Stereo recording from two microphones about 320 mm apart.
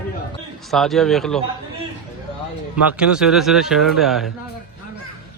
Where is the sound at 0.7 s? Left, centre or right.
Centre.